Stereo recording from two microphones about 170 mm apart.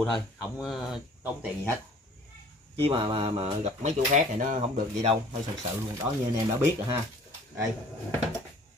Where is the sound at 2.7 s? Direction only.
35° right (ahead or behind).